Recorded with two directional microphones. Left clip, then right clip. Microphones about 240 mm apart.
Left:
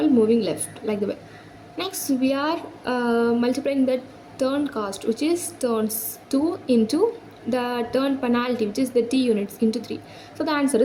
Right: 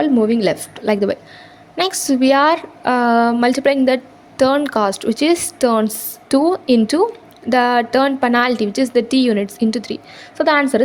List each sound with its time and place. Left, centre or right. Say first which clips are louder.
0.0 s a woman's voice: right 4 dB; right